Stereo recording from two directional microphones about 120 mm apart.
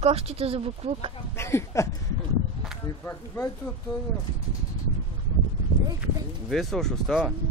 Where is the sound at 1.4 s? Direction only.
20° left (ahead or behind).